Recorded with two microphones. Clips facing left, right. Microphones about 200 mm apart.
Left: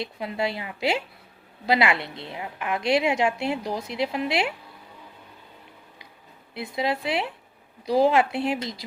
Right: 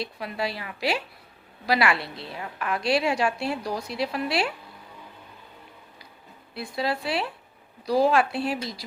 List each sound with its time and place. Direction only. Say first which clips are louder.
0.0 s a woman's voice: left 2 dB; 20° left (ahead or behind)
6.5 s a woman's voice: left 1 dB; 20° left (ahead or behind)